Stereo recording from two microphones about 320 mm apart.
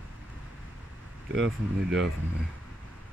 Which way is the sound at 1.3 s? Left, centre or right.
Right.